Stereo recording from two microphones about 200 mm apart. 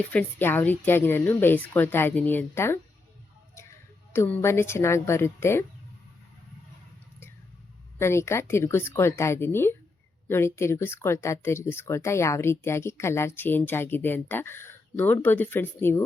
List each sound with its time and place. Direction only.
0.0 s speech: 5° left (ahead or behind)
4.1 s speech: 10° left (ahead or behind)
7.9 s speech: 15° left (ahead or behind)